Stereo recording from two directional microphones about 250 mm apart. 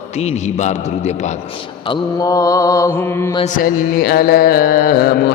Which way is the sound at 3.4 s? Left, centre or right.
Left.